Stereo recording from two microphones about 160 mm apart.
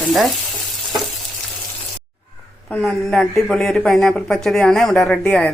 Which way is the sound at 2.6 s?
Centre (ahead or behind).